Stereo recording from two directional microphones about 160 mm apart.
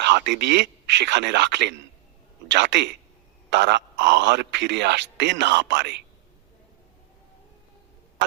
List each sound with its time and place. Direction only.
0.0 s a man's voice: 90° right